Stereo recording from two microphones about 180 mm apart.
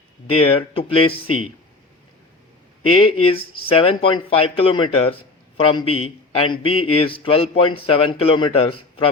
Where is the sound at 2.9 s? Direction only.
30° left (ahead or behind).